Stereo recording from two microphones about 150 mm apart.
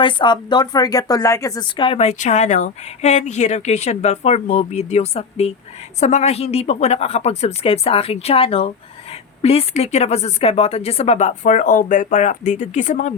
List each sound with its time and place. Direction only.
0.0 s speech: 30° left (ahead or behind)
2.0 s speech: 50° left (ahead or behind)